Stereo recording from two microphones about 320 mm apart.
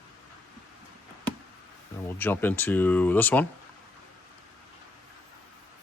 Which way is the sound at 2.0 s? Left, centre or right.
Centre.